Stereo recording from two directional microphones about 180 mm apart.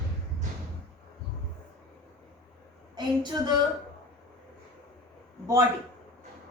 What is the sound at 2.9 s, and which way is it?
Speech, 25° right (ahead or behind).